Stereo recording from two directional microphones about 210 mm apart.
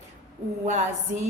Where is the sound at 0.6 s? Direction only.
35° right (ahead or behind).